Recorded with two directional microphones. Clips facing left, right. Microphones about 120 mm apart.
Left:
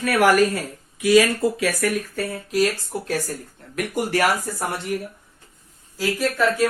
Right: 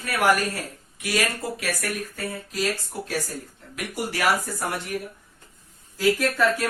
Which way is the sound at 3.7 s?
50° left (ahead or behind).